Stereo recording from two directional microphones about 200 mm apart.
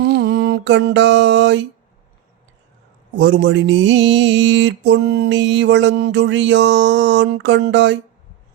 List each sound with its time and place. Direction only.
0.0 s mantra: 60° right (ahead or behind)
3.2 s mantra: 60° right (ahead or behind)